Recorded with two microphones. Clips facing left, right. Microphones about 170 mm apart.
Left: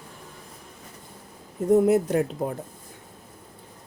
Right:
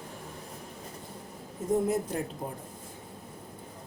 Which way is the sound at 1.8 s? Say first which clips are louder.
Left 9 dB; 75° left (ahead or behind).